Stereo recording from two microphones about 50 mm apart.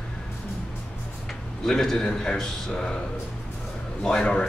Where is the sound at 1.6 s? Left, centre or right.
Centre.